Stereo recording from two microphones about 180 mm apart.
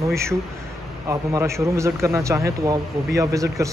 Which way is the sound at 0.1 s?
15° right (ahead or behind).